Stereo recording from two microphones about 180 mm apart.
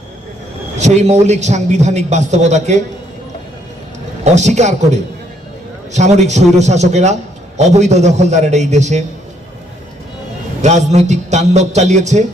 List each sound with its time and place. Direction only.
0.8 s a man's voice: 40° right (ahead or behind)
4.2 s a man's voice: 40° right (ahead or behind)
10.6 s a man's voice: 40° right (ahead or behind)